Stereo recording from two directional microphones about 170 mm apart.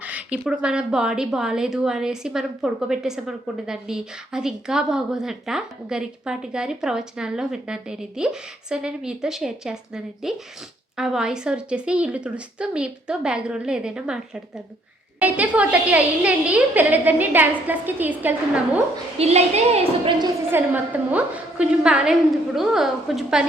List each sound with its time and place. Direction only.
0.0 s a woman's voice: 10° right (ahead or behind)
19.2 s a woman's voice: 40° right (ahead or behind)
20.5 s speech: 10° right (ahead or behind)